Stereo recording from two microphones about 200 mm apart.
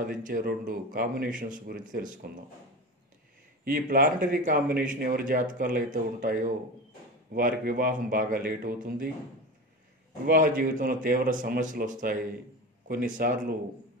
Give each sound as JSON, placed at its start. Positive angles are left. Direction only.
{"t": 0.2, "sound": "speech", "side_deg": -45}
{"t": 3.6, "sound": "speech", "side_deg": -45}
{"t": 10.2, "sound": "speech", "side_deg": -45}